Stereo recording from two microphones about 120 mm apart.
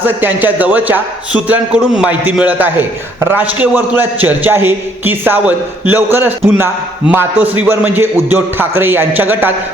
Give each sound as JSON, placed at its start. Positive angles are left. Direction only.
{"t": 0.0, "sound": "a man's voice", "side_deg": -15}